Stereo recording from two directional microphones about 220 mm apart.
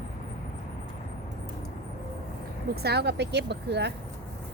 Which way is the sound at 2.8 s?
50° right (ahead or behind).